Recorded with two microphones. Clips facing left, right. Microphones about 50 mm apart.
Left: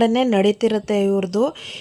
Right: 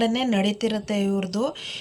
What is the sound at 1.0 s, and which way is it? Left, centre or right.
Speech, centre.